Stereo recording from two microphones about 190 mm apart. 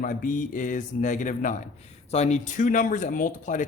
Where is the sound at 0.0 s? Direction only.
50° left (ahead or behind).